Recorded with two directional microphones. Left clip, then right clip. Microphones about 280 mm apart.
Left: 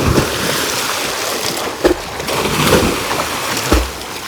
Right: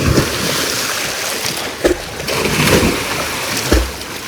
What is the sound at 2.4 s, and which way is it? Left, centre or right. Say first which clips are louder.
Boat: even; centre.